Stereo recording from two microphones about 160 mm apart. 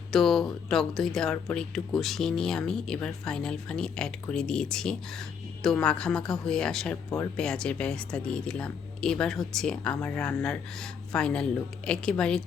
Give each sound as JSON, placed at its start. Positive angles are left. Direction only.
{"t": 0.1, "sound": "speech", "side_deg": 0}